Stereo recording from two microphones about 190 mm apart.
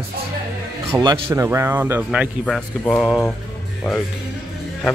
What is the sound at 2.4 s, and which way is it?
Speech, 5° left (ahead or behind).